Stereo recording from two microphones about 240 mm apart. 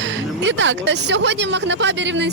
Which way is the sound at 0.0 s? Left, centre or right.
Right.